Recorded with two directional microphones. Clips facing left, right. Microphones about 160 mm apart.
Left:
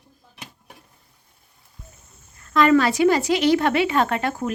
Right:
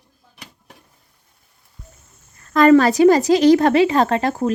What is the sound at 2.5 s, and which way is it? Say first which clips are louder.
A woman's voice: right 5 dB; 45° right (ahead or behind).